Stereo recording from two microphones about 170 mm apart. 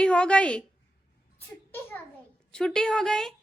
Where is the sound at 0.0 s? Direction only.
5° left (ahead or behind).